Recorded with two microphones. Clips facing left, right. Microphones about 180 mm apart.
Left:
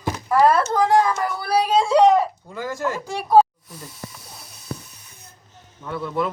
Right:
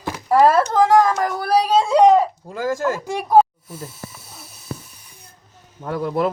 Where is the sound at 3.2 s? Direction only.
15° right (ahead or behind).